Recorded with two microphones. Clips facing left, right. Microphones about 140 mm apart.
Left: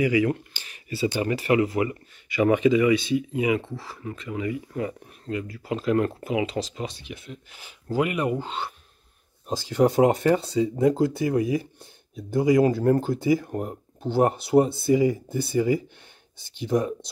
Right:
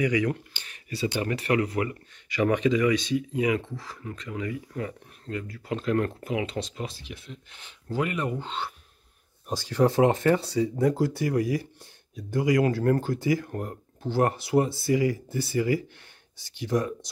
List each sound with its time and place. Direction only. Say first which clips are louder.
0.0 s speech: left 3 dB; 5° left (ahead or behind)
9.7 s speech: left 2 dB; 15° left (ahead or behind)
15.6 s speech: left 2 dB; 35° left (ahead or behind)
16.5 s speech: left 3 dB; 20° left (ahead or behind)